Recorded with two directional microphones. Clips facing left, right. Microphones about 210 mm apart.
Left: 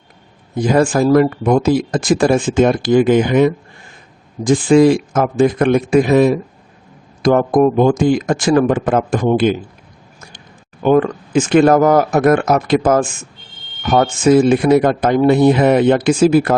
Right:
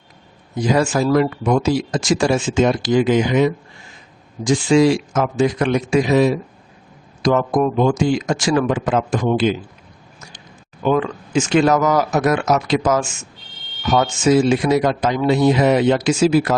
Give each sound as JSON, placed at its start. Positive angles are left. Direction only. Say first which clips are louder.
{"t": 0.5, "sound": "speech", "louder": "left 4 dB", "side_deg": 50}
{"t": 10.8, "sound": "speech", "louder": "left 5 dB", "side_deg": 55}